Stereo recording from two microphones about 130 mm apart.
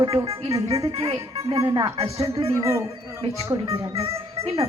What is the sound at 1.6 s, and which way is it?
Music, 25° right (ahead or behind).